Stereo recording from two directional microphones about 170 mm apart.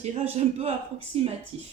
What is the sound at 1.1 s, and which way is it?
Speech, 35° right (ahead or behind).